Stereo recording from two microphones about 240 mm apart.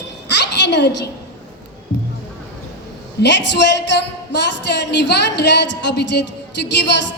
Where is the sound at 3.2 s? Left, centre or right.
Left.